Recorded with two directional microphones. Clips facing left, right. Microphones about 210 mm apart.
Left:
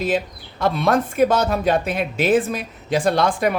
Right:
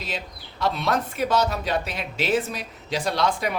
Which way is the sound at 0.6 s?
50° left (ahead or behind).